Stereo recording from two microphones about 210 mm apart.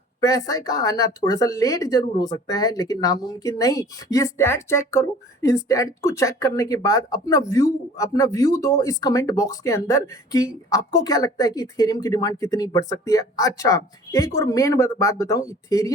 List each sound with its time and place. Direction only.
0.2 s a woman's voice: 15° left (ahead or behind)